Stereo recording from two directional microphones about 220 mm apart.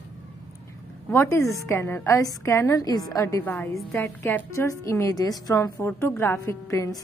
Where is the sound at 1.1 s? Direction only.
10° left (ahead or behind).